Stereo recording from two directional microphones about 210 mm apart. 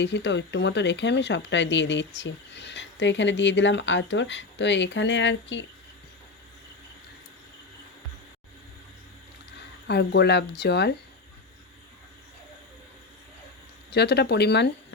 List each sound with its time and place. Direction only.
0.0 s speech: 55° left (ahead or behind)
9.8 s speech: 55° left (ahead or behind)
13.9 s speech: 50° left (ahead or behind)